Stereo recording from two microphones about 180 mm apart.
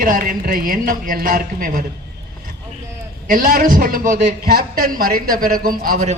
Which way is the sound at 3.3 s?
50° right (ahead or behind).